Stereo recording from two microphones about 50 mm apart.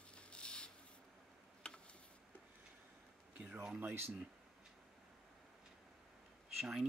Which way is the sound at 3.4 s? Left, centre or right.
Centre.